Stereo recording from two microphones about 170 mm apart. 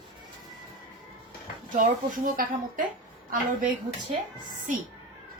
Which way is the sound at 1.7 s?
50° right (ahead or behind).